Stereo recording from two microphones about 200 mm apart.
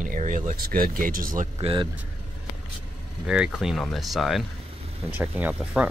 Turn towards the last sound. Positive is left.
turn(degrees=-5)  # may be behind; listen again after turning